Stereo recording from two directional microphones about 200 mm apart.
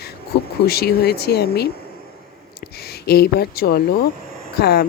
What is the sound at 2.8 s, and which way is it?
Speech, 55° left (ahead or behind).